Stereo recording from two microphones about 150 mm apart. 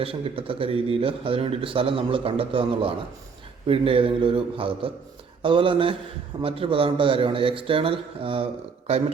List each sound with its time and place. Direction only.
0.0 s speech: 40° right (ahead or behind)